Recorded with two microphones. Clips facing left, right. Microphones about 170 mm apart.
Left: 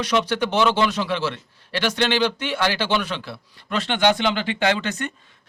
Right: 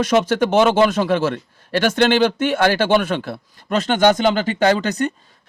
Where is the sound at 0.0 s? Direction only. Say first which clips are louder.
Right 5 dB; 45° right (ahead or behind).